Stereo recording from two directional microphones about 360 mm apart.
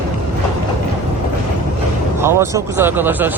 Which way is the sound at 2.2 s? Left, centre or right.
Centre.